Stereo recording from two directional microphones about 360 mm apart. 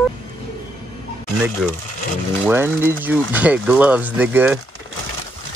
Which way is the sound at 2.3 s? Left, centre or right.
Centre.